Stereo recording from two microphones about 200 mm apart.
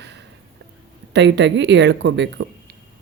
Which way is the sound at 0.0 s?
60° right (ahead or behind).